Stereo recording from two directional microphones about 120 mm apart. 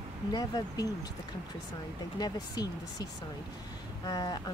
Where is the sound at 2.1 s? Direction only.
35° left (ahead or behind).